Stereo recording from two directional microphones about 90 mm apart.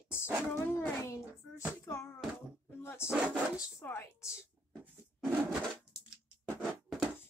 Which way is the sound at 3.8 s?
25° left (ahead or behind).